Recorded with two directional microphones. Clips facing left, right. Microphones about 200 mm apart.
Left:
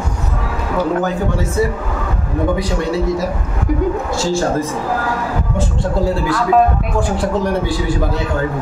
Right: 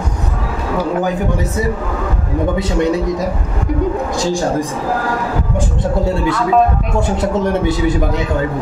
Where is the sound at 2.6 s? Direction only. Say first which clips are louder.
Right 3 dB; 20° right (ahead or behind).